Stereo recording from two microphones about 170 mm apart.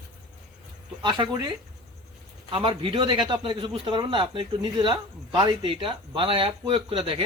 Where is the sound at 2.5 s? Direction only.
30° right (ahead or behind).